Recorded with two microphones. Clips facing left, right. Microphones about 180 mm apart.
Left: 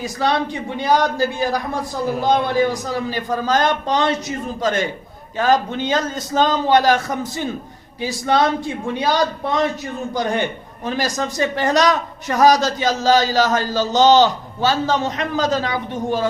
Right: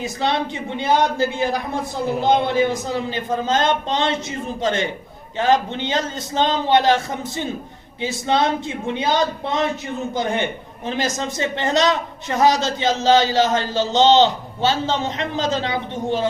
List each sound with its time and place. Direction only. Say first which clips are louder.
0.0 s a man's voice: left 2 dB; 25° right (ahead or behind)